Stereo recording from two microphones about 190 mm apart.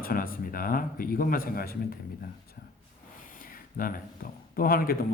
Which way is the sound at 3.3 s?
50° left (ahead or behind).